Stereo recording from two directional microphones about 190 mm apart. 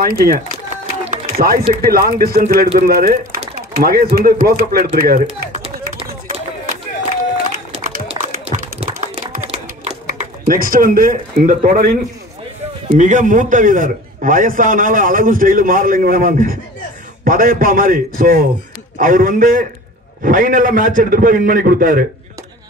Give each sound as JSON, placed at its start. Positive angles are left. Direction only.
{"t": 0.0, "sound": "a man's voice", "side_deg": -50}
{"t": 1.2, "sound": "a sound", "side_deg": -50}
{"t": 1.7, "sound": "a man's voice", "side_deg": -50}
{"t": 5.2, "sound": "run", "side_deg": -30}
{"t": 6.2, "sound": "a sound", "side_deg": -45}
{"t": 8.1, "sound": "music", "side_deg": -35}
{"t": 8.9, "sound": "typing", "side_deg": -40}
{"t": 12.9, "sound": "a man's voice", "side_deg": -40}